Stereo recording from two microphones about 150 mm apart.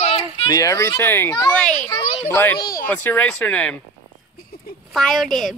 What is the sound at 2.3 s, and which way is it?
Speech, 15° left (ahead or behind).